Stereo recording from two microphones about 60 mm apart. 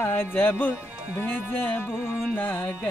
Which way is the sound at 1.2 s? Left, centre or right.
Left.